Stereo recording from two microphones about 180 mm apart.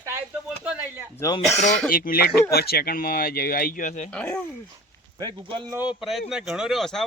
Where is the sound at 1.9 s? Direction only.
50° left (ahead or behind).